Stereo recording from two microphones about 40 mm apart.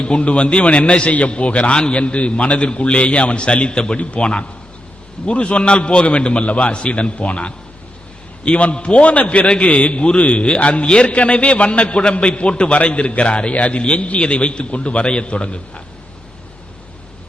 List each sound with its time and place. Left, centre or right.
0.0 s a man's voice: left